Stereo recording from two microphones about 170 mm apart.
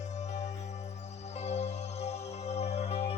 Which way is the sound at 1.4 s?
40° left (ahead or behind).